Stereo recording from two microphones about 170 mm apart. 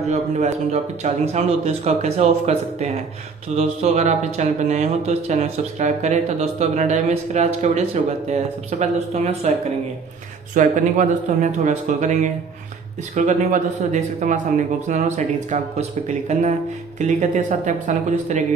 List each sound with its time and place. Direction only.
0.1 s speech: 40° right (ahead or behind)
10.5 s speech: 45° right (ahead or behind)